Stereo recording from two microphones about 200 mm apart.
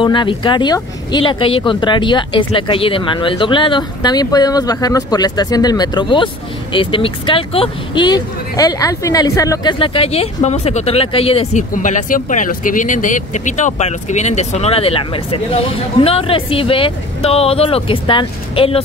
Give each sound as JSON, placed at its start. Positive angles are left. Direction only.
{"t": 0.0, "sound": "speech", "side_deg": 25}
{"t": 11.7, "sound": "speech", "side_deg": 40}